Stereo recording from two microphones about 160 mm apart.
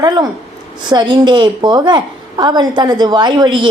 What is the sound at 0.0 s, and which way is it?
A woman's voice, 25° right (ahead or behind).